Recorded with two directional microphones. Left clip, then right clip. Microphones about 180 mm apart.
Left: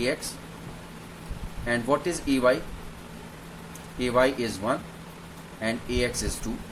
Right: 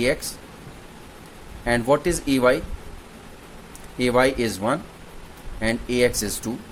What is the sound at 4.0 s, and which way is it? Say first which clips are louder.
Speech: right 4 dB; 50° right (ahead or behind).